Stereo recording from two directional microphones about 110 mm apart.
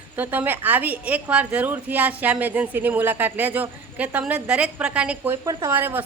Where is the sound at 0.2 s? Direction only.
15° right (ahead or behind).